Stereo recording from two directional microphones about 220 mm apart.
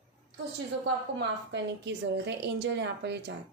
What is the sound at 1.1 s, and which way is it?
A woman's voice, 50° right (ahead or behind).